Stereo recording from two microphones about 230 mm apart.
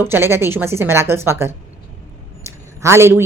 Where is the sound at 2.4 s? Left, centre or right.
Centre.